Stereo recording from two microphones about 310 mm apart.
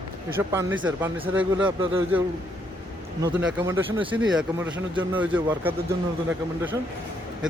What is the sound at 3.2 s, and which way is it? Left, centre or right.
A man's voice, centre.